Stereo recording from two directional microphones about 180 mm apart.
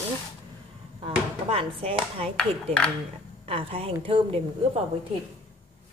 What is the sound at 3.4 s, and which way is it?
Speech, 30° right (ahead or behind).